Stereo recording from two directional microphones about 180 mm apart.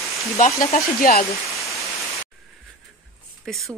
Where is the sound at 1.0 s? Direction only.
55° left (ahead or behind).